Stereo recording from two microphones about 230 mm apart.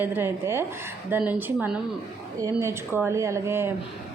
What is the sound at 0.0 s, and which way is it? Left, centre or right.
A woman's voice, centre.